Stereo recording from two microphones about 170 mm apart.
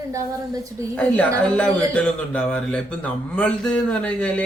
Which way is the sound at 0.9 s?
5° left (ahead or behind).